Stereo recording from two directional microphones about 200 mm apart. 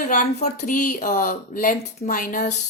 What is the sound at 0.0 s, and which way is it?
Speech, 40° left (ahead or behind).